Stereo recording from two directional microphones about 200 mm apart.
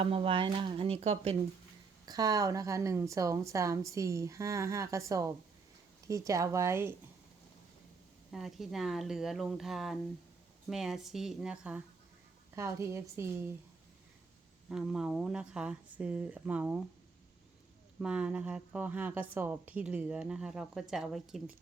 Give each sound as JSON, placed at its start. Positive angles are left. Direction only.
{"t": 0.0, "sound": "speech", "side_deg": -30}
{"t": 2.0, "sound": "a woman's voice", "side_deg": -20}
{"t": 8.3, "sound": "a woman's voice", "side_deg": 0}
{"t": 14.7, "sound": "a woman's voice", "side_deg": 0}
{"t": 18.0, "sound": "a woman's voice", "side_deg": -5}